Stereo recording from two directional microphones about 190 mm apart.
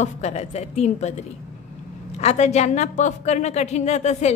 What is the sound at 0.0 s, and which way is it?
Speech, 35° left (ahead or behind).